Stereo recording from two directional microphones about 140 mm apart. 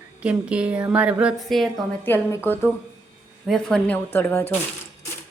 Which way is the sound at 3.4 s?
5° left (ahead or behind).